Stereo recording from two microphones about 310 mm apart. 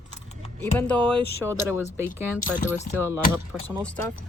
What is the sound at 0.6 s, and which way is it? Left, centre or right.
Speech, centre.